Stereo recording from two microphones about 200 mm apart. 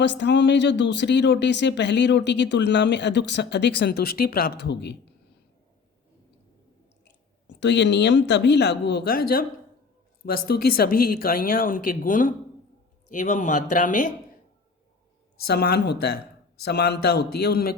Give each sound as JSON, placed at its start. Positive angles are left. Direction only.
{"t": 0.0, "sound": "speech", "side_deg": 60}
{"t": 7.6, "sound": "speech", "side_deg": 60}
{"t": 15.4, "sound": "speech", "side_deg": 55}